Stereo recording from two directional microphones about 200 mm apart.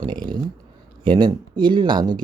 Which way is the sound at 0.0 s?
20° right (ahead or behind).